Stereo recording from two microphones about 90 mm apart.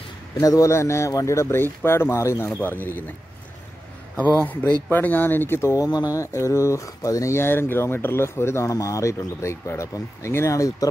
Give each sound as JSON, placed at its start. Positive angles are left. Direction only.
{"t": 0.4, "sound": "speech", "side_deg": 40}
{"t": 4.9, "sound": "speech", "side_deg": 20}
{"t": 5.9, "sound": "speech", "side_deg": 45}